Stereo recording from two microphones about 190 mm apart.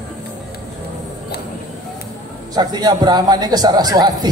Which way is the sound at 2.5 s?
20° right (ahead or behind).